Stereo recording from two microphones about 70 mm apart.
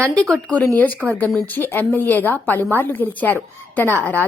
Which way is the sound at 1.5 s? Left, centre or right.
Left.